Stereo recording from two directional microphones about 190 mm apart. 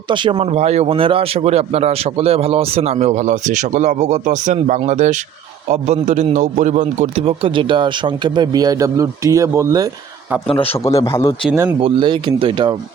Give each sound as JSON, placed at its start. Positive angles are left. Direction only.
{"t": 0.1, "sound": "speech", "side_deg": -25}
{"t": 10.5, "sound": "a man's voice", "side_deg": 30}
{"t": 11.0, "sound": "speech", "side_deg": 15}
{"t": 11.8, "sound": "speech", "side_deg": -25}